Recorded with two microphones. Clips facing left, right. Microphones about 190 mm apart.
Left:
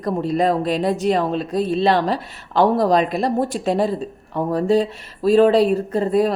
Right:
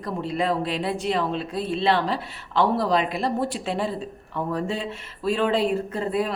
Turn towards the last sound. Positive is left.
turn(degrees=40)  # may be behind; listen again after turning